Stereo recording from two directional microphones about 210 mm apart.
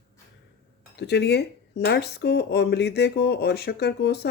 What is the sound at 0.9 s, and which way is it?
Speech, 50° left (ahead or behind).